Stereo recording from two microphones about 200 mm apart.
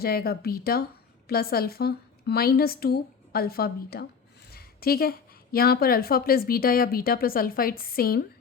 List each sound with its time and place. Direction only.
0.0 s a woman's voice: 50° left (ahead or behind)